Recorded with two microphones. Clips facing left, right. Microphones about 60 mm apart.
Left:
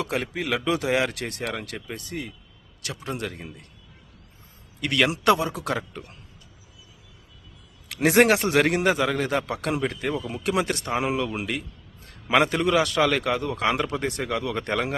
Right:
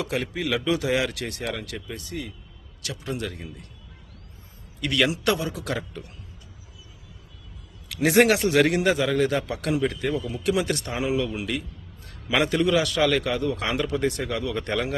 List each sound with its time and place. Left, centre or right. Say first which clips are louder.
0.0 s a man's voice: even; left
4.9 s a man's voice: left 2 dB; left
8.0 s a man's voice: even; left
8.9 s a man's voice: right 1 dB; centre
9.4 s a man's voice: left 1 dB; left
9.8 s a man's voice: right 2 dB; left
10.2 s a man's voice: even; left
14.2 s a man's voice: left 1 dB; centre